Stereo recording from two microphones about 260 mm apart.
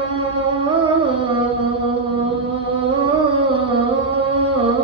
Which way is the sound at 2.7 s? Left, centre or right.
Centre.